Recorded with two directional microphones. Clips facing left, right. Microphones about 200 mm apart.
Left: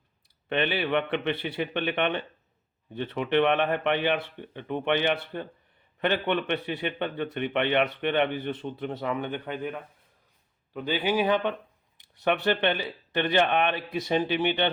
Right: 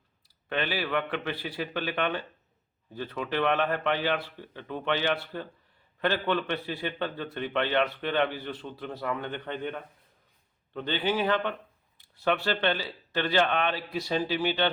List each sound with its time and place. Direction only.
0.4 s a man's voice: 20° left (ahead or behind)